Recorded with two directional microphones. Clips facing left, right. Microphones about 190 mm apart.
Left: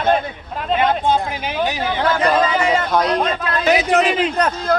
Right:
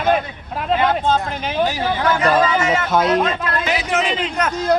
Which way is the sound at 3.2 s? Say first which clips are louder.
Left 1 dB; 40° left (ahead or behind).